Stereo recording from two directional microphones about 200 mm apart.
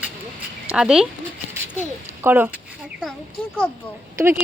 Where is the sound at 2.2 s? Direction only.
10° right (ahead or behind).